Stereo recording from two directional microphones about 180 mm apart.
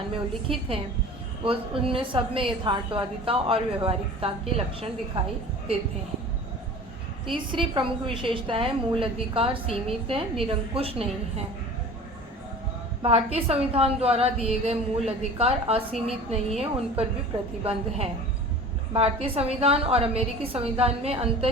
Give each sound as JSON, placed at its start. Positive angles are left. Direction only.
{"t": 0.4, "sound": "a woman's voice", "side_deg": -30}
{"t": 7.3, "sound": "a woman's voice", "side_deg": -30}
{"t": 13.0, "sound": "a woman's voice", "side_deg": -35}